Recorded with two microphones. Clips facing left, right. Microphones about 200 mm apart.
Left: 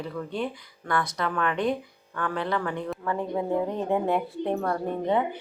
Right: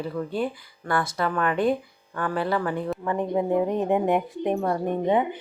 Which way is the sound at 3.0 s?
20° right (ahead or behind).